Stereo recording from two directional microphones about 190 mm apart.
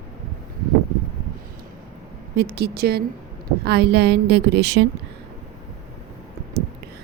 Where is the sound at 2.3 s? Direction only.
60° right (ahead or behind).